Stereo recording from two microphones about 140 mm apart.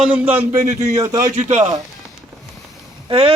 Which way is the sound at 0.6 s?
65° right (ahead or behind).